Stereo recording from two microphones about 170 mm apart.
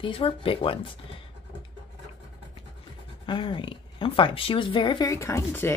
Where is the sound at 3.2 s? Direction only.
30° left (ahead or behind).